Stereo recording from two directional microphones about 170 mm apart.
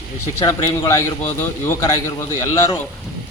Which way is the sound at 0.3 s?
20° left (ahead or behind).